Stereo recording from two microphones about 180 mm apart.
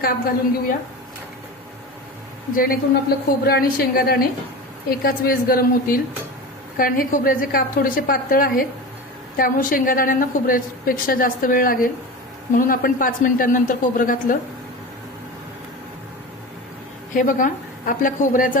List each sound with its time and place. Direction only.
2.6 s a woman's voice: 55° left (ahead or behind)
17.2 s a woman's voice: 45° left (ahead or behind)